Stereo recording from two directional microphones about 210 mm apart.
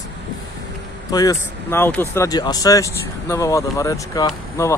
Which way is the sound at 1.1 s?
15° left (ahead or behind).